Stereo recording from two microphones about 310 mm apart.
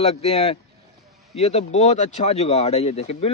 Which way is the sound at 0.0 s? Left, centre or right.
Centre.